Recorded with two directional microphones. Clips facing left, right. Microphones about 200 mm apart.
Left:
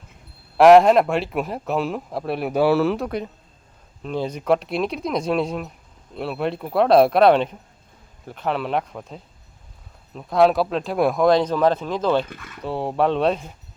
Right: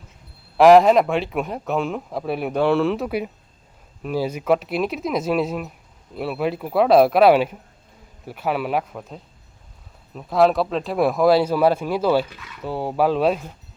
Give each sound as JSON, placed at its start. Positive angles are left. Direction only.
{"t": 0.5, "sound": "speech", "side_deg": 0}
{"t": 12.3, "sound": "speech", "side_deg": 50}
{"t": 12.6, "sound": "speech", "side_deg": 0}